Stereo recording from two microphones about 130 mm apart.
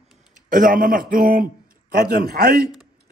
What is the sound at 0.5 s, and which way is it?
A man's voice, 90° right.